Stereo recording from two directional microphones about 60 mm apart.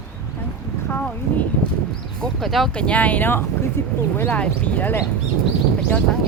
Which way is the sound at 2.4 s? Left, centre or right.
Centre.